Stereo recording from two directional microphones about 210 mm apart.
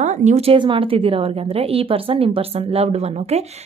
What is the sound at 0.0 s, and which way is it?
A woman's voice, 35° right (ahead or behind).